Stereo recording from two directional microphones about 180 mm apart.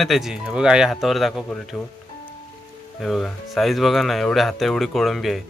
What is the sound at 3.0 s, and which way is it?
A man's voice, centre (ahead or behind).